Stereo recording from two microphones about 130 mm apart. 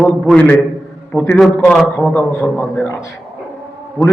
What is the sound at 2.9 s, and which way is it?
Speech, 25° left (ahead or behind).